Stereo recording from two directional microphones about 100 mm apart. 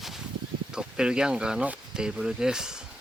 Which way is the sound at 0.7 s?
5° right (ahead or behind).